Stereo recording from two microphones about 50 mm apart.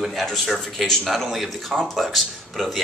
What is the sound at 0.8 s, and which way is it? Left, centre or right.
Speech, centre.